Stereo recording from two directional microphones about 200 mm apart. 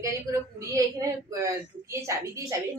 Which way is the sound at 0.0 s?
15° right (ahead or behind).